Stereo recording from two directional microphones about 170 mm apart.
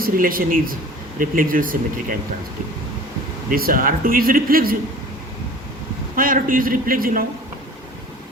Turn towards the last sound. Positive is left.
turn(degrees=-55)  # may be behind; listen again after turning